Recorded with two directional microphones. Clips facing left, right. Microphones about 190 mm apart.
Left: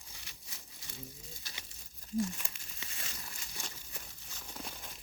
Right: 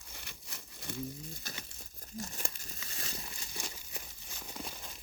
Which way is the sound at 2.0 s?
40° right (ahead or behind).